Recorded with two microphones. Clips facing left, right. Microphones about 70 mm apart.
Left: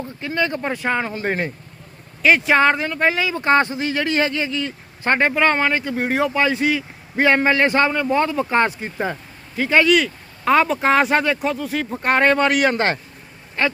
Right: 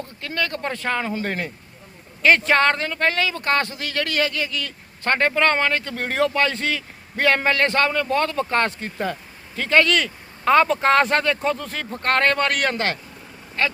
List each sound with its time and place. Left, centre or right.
0.2 s speech: centre
2.2 s speech: centre
12.7 s speech: left